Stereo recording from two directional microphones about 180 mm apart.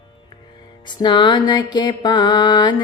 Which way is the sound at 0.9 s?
25° left (ahead or behind).